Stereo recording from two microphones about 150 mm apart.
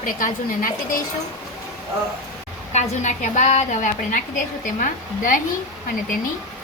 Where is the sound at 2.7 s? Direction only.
55° left (ahead or behind).